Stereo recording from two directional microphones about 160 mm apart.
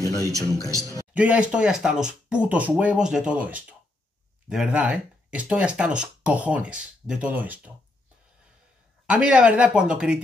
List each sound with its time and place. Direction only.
0.0 s a man's voice: 20° right (ahead or behind)
1.1 s speech: 10° right (ahead or behind)
9.0 s speech: 5° right (ahead or behind)